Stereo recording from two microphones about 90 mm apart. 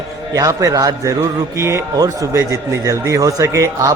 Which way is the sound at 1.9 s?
40° right (ahead or behind).